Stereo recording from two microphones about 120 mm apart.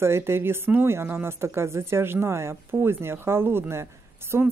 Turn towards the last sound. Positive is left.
turn(degrees=-20)  # may be behind; listen again after turning